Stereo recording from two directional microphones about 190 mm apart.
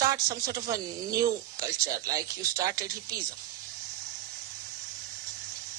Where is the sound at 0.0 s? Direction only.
15° right (ahead or behind).